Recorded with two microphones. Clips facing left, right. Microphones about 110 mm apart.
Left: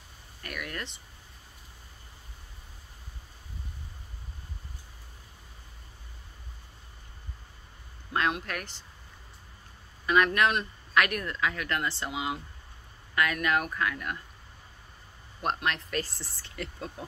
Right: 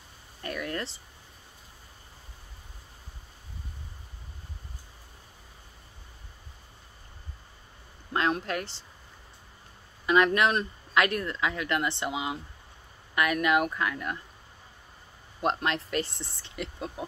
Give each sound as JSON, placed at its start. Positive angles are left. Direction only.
{"t": 0.4, "sound": "a sound", "side_deg": -30}
{"t": 8.1, "sound": "speech", "side_deg": -30}
{"t": 10.0, "sound": "speech", "side_deg": -25}
{"t": 15.4, "sound": "speech", "side_deg": -25}